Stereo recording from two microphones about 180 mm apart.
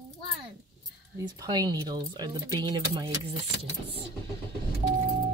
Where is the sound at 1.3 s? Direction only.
20° right (ahead or behind).